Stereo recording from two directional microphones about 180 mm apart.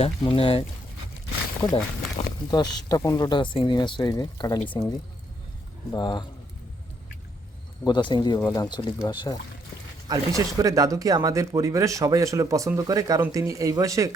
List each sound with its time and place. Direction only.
0.0 s speech: 30° left (ahead or behind)
1.7 s speech: 25° left (ahead or behind)
5.9 s speech: 25° left (ahead or behind)
7.9 s speech: 25° left (ahead or behind)
10.1 s speech: 20° right (ahead or behind)